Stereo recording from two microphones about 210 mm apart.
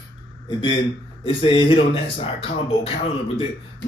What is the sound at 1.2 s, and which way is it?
Speech, 25° left (ahead or behind).